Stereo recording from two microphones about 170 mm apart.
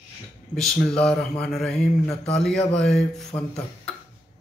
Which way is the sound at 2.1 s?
40° left (ahead or behind).